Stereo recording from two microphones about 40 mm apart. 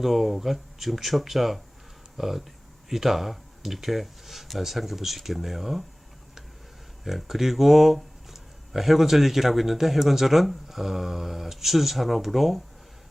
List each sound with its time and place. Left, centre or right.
0.0 s speech: centre
7.0 s speech: centre